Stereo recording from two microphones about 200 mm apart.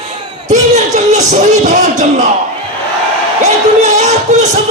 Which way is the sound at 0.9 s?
35° right (ahead or behind).